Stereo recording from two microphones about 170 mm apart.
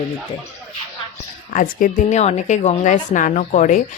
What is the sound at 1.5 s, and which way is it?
A woman's voice, 55° left (ahead or behind).